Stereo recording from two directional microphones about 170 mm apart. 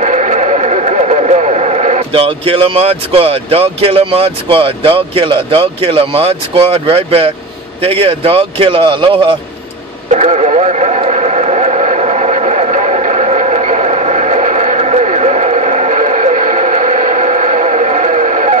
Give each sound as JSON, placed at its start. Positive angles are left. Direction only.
{"t": 0.0, "sound": "speech", "side_deg": -40}
{"t": 10.1, "sound": "radio", "side_deg": -40}